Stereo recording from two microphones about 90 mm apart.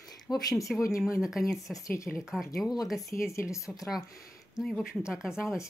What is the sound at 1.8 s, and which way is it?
Speech, 35° left (ahead or behind).